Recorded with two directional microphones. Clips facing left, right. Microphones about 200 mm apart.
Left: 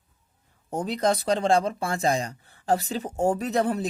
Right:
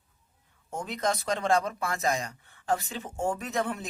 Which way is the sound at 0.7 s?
35° left (ahead or behind).